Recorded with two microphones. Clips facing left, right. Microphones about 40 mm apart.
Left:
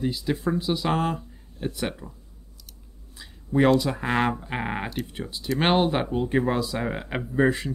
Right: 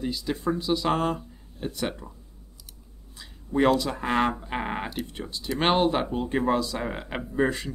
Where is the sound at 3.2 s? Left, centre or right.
Centre.